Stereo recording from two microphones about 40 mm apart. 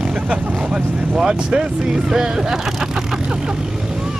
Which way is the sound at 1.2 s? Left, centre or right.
Centre.